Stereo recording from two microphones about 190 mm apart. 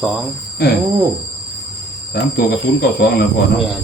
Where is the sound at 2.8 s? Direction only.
55° left (ahead or behind).